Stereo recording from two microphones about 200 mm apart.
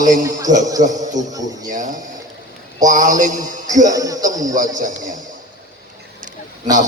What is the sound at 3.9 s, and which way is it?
Speech, 15° right (ahead or behind).